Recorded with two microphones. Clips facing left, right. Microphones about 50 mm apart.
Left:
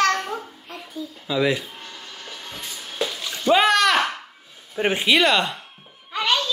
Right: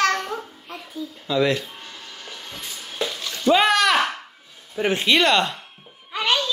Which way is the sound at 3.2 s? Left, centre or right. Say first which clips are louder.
Right 1 dB; centre.